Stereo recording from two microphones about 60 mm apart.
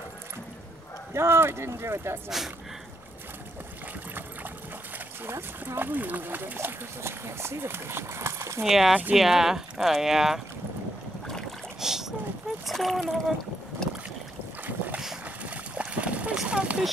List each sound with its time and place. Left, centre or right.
1.1 s speech: right
2.2 s speech: centre
4.9 s a sound: right
5.8 s speech: right
7.0 s speech: right
8.6 s speech: centre
11.8 s boat: centre
12.6 s a child's voice: centre
13.8 s boat: centre
15.2 s a sound: right
16.4 s speech: centre